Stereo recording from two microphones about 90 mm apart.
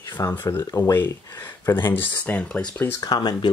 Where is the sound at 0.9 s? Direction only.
25° left (ahead or behind).